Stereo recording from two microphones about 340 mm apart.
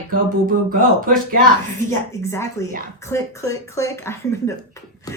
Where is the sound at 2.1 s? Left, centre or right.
Centre.